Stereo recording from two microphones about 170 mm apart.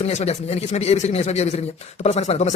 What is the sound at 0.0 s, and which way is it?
Speech, 40° left (ahead or behind).